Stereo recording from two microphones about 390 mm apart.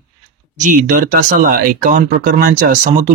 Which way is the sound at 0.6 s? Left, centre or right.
Centre.